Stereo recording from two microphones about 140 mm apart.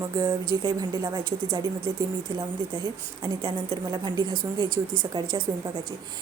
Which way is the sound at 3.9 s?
30° right (ahead or behind).